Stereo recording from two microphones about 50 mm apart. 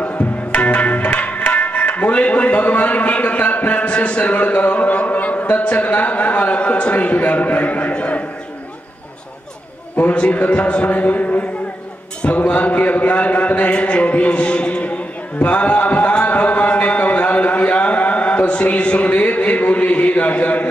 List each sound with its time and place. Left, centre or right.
0.0 s music: left
9.9 s a man's voice: left
15.4 s a sound: left